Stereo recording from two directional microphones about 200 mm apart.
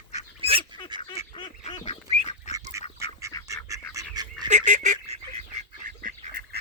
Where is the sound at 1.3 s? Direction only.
25° left (ahead or behind).